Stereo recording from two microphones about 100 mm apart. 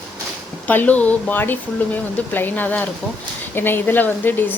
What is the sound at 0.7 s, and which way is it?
A woman's voice, 15° left (ahead or behind).